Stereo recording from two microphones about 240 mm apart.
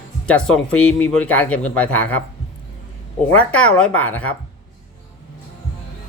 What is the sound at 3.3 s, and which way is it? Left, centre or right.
Speech, centre.